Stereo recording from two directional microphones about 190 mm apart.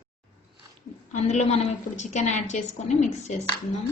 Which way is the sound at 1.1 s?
35° left (ahead or behind).